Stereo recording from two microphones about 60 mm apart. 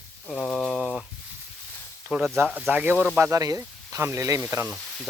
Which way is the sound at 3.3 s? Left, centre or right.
Right.